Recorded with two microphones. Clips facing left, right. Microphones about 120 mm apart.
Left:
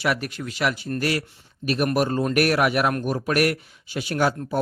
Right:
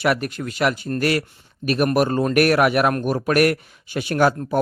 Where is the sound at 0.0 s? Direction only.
50° right (ahead or behind).